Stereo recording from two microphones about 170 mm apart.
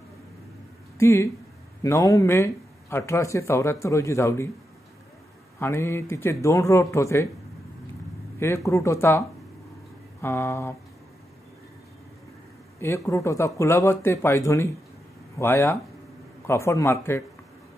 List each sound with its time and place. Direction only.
0.9 s speech: 15° left (ahead or behind)
5.6 s speech: 15° left (ahead or behind)
8.4 s speech: 15° left (ahead or behind)
10.2 s speech: 15° left (ahead or behind)
12.8 s speech: 15° left (ahead or behind)